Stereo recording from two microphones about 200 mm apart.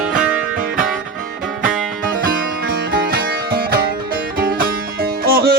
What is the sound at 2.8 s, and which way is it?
Music, 50° right (ahead or behind).